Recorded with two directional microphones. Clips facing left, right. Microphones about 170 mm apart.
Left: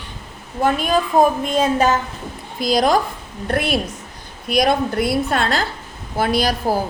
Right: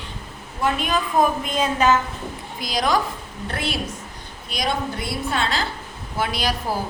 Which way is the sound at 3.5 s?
55° left (ahead or behind).